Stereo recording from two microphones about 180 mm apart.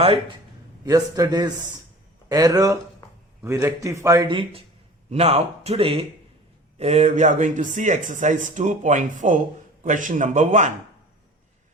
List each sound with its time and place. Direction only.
0.9 s a man's voice: 20° right (ahead or behind); by 10.7 s 40° right (ahead or behind)